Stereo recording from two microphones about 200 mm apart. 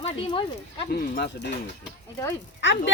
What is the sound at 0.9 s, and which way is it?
Speech, 55° left (ahead or behind).